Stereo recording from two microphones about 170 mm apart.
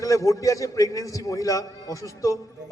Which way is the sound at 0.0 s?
20° left (ahead or behind).